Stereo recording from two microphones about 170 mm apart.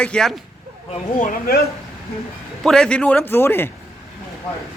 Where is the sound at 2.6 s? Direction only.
5° left (ahead or behind).